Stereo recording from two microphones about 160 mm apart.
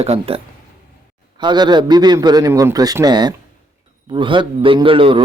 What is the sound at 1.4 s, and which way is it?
A man's voice, 25° right (ahead or behind).